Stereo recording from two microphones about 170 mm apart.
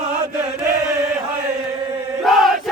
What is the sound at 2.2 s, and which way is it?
Chant, centre (ahead or behind).